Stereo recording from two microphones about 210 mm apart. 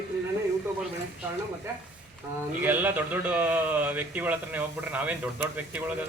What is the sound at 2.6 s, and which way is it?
A man's voice, 10° right (ahead or behind).